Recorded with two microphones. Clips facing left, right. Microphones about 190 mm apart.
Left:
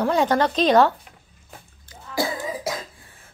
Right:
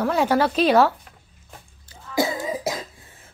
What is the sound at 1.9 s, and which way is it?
Cough, 25° right (ahead or behind).